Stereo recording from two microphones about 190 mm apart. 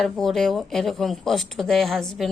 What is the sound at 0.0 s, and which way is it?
Speech, centre (ahead or behind).